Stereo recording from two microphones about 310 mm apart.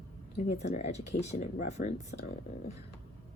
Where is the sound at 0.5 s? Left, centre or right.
Left.